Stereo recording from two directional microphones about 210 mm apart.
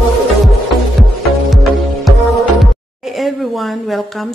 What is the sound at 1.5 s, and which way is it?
Music, centre (ahead or behind).